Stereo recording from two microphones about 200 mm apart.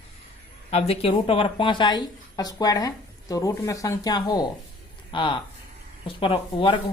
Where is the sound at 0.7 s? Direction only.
30° left (ahead or behind).